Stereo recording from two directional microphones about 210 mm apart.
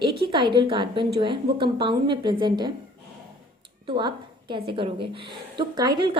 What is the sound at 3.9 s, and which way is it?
A woman's voice, 20° right (ahead or behind).